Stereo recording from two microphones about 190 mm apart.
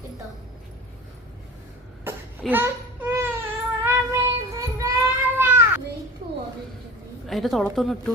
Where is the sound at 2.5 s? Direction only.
10° right (ahead or behind).